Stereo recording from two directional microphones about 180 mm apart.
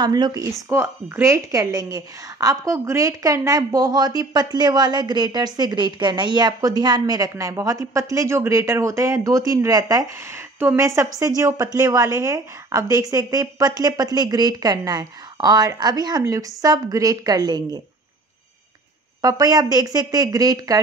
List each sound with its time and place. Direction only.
0.0 s a woman's voice: 20° right (ahead or behind)
19.2 s a woman's voice: 20° right (ahead or behind)